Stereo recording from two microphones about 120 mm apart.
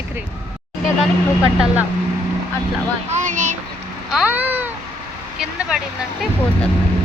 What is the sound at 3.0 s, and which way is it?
Child singing, 85° right.